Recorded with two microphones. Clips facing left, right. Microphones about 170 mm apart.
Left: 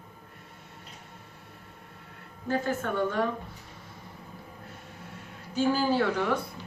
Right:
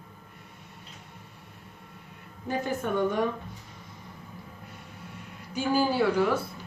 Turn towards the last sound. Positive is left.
turn(degrees=-5)  # may be behind; listen again after turning